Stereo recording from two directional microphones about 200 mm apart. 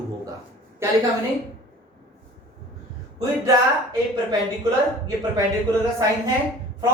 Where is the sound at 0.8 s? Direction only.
15° right (ahead or behind).